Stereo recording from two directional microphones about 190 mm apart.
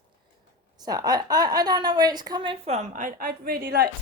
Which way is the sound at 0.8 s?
20° right (ahead or behind).